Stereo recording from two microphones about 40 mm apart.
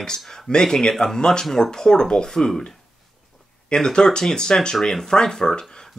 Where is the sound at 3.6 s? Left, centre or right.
Centre.